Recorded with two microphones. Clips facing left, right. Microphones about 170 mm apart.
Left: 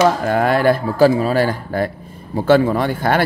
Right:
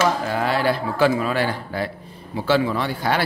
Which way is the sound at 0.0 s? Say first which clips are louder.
Left 6 dB; 55° left (ahead or behind).